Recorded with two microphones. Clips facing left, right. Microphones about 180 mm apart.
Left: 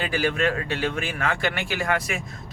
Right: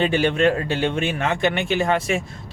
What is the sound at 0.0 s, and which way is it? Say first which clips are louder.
Speech: right 6 dB; 25° right (ahead or behind).